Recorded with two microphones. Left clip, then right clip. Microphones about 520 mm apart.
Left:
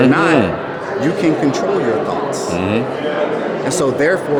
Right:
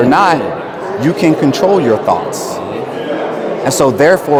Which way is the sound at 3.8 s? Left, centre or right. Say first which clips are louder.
Right 7 dB; right.